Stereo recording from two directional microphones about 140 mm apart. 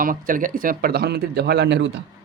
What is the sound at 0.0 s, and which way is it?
Speech, 80° right.